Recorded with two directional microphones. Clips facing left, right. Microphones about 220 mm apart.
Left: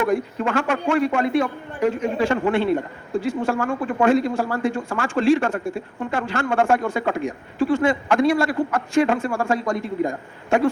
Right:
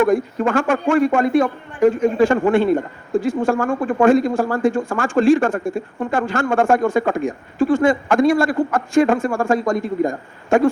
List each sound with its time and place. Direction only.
0.0 s speech: 45° right (ahead or behind)